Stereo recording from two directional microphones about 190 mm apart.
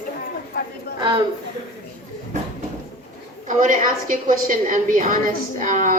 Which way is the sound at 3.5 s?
45° right (ahead or behind).